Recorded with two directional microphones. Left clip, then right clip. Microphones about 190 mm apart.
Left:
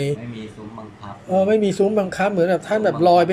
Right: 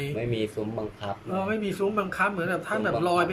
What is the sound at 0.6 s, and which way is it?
Speech, 50° right (ahead or behind).